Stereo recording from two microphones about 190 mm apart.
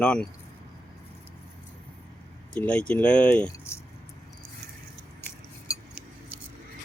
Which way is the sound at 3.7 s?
15° left (ahead or behind).